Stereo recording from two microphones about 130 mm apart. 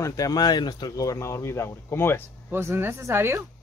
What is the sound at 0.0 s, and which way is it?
Speech, 25° left (ahead or behind).